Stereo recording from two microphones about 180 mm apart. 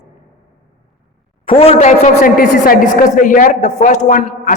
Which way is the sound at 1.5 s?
35° left (ahead or behind).